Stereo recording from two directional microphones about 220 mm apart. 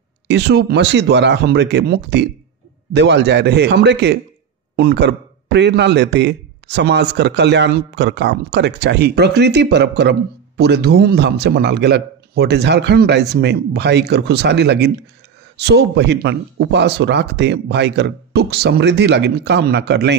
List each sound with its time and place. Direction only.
0.3 s a man's voice: 50° right (ahead or behind)